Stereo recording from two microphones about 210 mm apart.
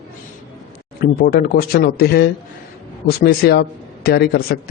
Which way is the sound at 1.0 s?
45° left (ahead or behind).